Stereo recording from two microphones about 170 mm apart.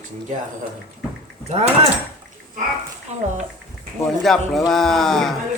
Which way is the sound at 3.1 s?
40° right (ahead or behind).